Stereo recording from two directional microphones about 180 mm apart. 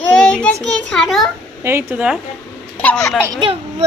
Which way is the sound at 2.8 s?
5° left (ahead or behind).